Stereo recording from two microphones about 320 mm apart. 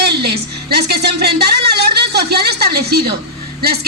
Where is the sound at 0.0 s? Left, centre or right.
Right.